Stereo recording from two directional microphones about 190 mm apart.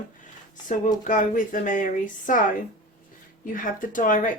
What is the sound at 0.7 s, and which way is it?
Speech, 40° left (ahead or behind).